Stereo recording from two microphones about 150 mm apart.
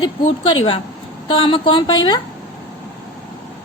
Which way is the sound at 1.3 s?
35° left (ahead or behind).